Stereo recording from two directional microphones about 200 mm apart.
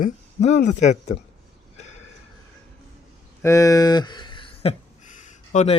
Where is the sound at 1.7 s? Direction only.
35° left (ahead or behind).